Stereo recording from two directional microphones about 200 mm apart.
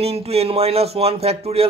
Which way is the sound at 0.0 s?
30° right (ahead or behind).